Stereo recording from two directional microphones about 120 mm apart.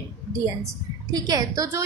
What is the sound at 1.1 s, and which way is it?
Speech, 35° right (ahead or behind).